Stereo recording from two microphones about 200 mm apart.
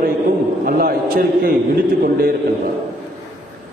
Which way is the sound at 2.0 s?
50° right (ahead or behind).